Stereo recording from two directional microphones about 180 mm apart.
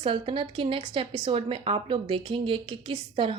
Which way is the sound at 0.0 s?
30° right (ahead or behind).